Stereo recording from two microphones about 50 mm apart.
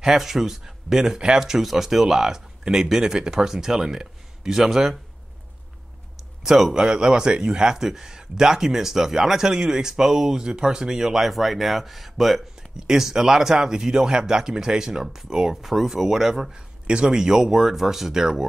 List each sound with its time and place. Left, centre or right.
0.0 s speech: centre
6.4 s speech: centre